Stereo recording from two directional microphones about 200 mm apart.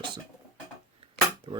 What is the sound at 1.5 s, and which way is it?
Speech, 25° right (ahead or behind).